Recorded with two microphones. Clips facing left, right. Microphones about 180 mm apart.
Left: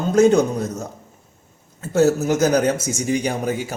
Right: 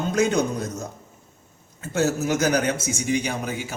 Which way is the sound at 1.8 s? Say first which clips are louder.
Left 6 dB; 40° left (ahead or behind).